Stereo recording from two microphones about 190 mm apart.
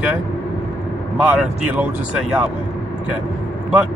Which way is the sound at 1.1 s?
5° right (ahead or behind).